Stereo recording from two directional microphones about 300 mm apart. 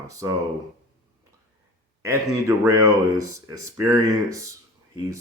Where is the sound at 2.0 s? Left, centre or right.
Centre.